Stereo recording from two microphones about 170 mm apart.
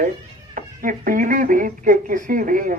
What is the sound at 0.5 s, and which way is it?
Speech, 55° right (ahead or behind).